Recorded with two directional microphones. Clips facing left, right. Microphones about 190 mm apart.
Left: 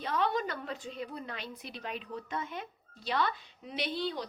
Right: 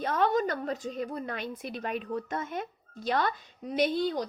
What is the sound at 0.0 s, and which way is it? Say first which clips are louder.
A woman's voice: right 5 dB; 50° right (ahead or behind).